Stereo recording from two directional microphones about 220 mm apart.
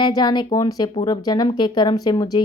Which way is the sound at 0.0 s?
20° left (ahead or behind).